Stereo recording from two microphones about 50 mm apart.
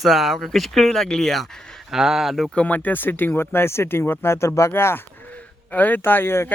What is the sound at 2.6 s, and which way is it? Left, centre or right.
Speech, left.